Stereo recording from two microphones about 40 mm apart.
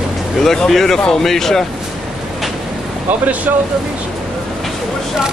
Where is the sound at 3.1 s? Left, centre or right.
Right.